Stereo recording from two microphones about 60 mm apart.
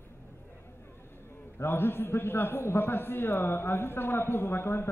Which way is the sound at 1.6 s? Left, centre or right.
Left.